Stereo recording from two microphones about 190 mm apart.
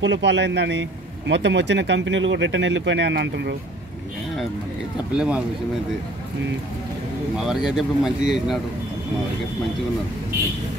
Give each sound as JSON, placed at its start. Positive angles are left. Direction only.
{"t": 0.0, "sound": "a man's voice", "side_deg": -65}
{"t": 5.1, "sound": "speech", "side_deg": -5}
{"t": 7.3, "sound": "speech", "side_deg": 0}